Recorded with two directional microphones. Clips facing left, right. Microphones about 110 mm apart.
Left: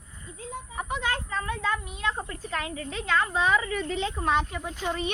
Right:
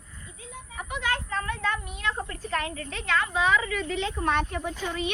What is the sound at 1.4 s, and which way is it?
A woman's voice, 20° left (ahead or behind).